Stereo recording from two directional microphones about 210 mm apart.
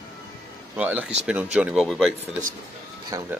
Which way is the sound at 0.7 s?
10° right (ahead or behind).